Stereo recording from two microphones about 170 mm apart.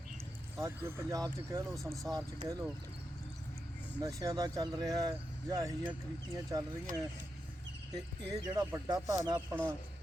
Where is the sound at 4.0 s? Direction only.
20° right (ahead or behind).